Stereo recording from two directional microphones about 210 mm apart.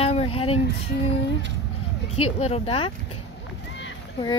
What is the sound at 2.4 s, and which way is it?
Speech, 30° left (ahead or behind).